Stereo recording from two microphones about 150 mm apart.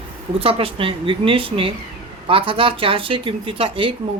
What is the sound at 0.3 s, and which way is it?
Speech, 40° right (ahead or behind).